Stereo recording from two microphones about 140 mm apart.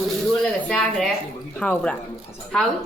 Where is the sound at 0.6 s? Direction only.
5° left (ahead or behind).